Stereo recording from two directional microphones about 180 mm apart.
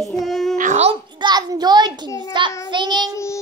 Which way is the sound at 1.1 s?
25° right (ahead or behind).